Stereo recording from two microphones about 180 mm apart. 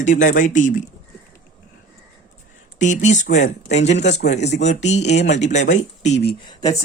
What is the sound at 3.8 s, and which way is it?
Speech, 75° left (ahead or behind).